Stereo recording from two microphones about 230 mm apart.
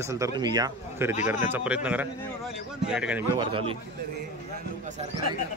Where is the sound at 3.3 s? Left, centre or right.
Right.